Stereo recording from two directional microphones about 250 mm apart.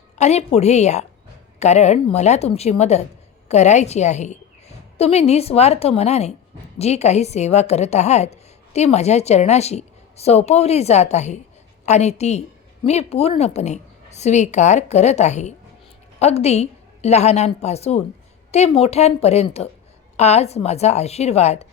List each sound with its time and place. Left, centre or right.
0.2 s a woman's voice: left